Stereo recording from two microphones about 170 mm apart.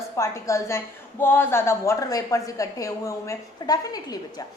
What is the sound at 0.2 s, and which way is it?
A woman's voice, 20° left (ahead or behind).